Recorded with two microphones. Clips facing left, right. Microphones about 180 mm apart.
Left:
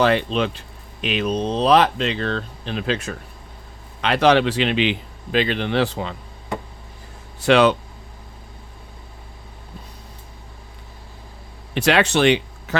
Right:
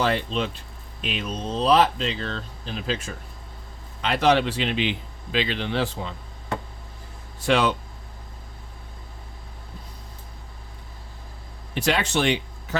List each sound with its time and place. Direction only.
0.0 s speech: 70° left (ahead or behind)
5.3 s speech: 55° left (ahead or behind); by 6.1 s 75° left (ahead or behind)
7.4 s speech: 75° left (ahead or behind)
11.7 s speech: 80° left